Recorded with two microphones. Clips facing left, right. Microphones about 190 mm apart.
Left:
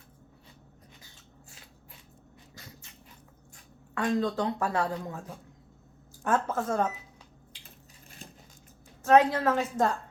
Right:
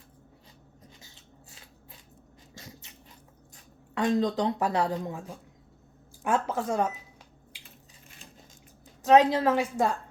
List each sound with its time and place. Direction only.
3.9 s a woman's voice: 20° right (ahead or behind)
9.0 s a woman's voice: 20° right (ahead or behind)